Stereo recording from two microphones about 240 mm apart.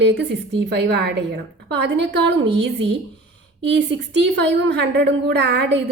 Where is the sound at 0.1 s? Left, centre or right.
Right.